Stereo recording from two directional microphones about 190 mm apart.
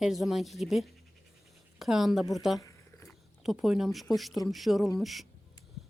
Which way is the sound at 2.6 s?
15° left (ahead or behind).